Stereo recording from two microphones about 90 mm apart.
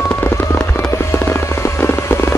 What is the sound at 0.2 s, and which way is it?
Fireworks, 25° left (ahead or behind).